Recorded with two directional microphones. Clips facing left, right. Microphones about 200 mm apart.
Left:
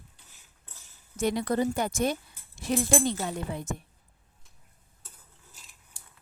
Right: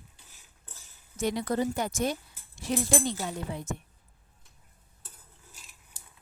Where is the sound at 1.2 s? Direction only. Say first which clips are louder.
Left 2 dB; 55° left (ahead or behind).